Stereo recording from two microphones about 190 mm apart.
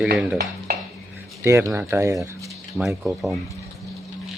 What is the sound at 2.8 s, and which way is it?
Speech, centre (ahead or behind).